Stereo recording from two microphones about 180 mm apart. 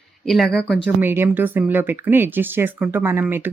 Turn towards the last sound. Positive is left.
turn(degrees=-10)  # may be behind; listen again after turning